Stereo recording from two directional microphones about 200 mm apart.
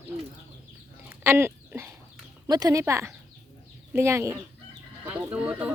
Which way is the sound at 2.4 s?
20° right (ahead or behind).